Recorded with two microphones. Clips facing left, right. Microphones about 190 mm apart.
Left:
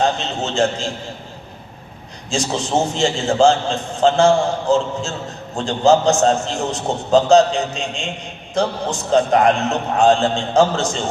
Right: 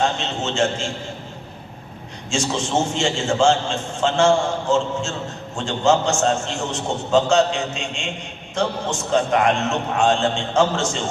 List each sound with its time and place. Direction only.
0.0 s a man's voice: 35° left (ahead or behind)
2.3 s a man's voice: 35° left (ahead or behind)